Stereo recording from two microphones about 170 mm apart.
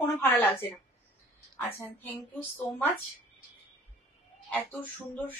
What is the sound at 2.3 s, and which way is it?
Speech, centre (ahead or behind).